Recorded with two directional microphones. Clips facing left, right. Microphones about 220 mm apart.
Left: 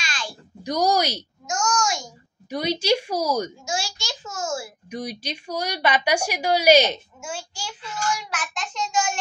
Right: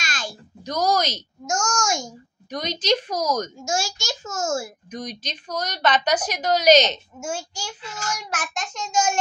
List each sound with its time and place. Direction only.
0.0 s a sound: 45° right (ahead or behind)
0.7 s a woman's voice: 15° left (ahead or behind)
1.4 s child singing: 45° right (ahead or behind)
2.5 s a woman's voice: 10° left (ahead or behind)
3.6 s child singing: 45° right (ahead or behind)
4.8 s a woman's voice: 10° left (ahead or behind)
7.2 s child singing: 45° right (ahead or behind)